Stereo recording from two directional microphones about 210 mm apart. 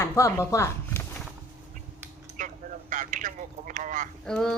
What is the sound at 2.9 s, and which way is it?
A man's voice, 40° right (ahead or behind).